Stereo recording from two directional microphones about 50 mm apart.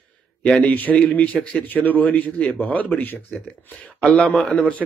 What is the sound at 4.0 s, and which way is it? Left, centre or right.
Speech, left.